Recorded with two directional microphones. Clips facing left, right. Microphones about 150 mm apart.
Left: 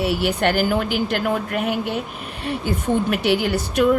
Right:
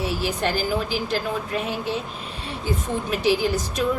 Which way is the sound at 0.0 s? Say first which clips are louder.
Left 5 dB; 65° left (ahead or behind).